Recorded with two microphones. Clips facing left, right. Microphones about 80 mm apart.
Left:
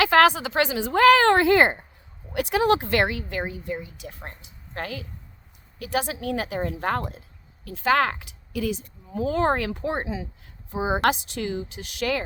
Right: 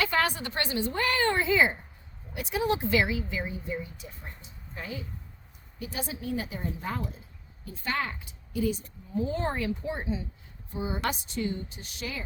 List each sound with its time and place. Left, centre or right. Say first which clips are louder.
0.0 s a woman's voice: left 10 dB; left
5.8 s a woman's voice: left 8 dB; left
7.6 s a woman's voice: left 11 dB; left